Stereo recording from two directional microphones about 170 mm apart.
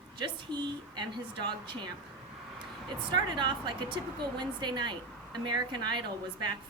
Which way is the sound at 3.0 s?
25° right (ahead or behind).